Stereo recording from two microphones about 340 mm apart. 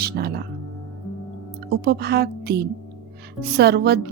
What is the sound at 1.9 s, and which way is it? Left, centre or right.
Speech, right.